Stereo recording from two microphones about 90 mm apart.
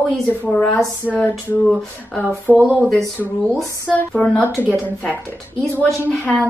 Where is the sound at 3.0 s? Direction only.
5° left (ahead or behind).